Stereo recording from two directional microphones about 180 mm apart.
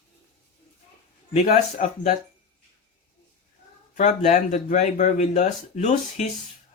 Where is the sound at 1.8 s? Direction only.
40° left (ahead or behind).